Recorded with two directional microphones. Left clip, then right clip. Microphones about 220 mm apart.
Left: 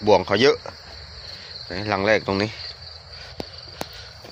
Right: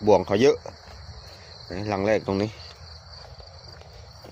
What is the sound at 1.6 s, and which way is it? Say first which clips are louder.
Speech: left 4 dB; 15° right (ahead or behind).